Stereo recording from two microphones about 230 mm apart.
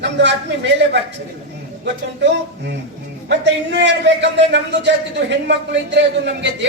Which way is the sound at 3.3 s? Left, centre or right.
Right.